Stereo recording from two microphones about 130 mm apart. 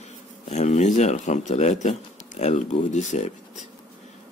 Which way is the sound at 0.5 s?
60° left (ahead or behind).